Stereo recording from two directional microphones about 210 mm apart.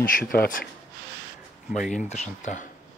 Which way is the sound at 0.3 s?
40° left (ahead or behind).